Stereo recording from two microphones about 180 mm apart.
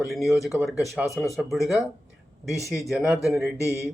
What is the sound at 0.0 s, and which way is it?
Speech, centre (ahead or behind).